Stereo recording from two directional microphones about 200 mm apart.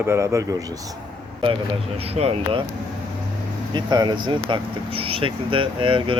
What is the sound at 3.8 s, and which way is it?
Speech, 20° right (ahead or behind).